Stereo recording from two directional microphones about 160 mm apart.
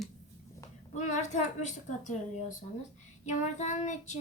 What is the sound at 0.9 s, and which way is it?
A child's voice, 50° left (ahead or behind).